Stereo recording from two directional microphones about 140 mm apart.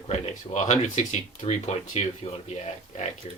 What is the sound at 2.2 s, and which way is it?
Speech, 45° left (ahead or behind).